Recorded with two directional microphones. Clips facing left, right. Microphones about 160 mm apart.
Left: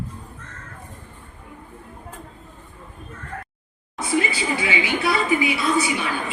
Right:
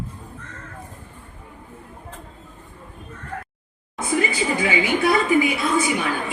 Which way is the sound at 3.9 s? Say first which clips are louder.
Right 1 dB; 50° right (ahead or behind).